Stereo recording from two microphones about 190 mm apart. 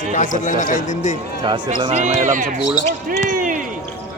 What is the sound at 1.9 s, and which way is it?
Speech, 40° right (ahead or behind).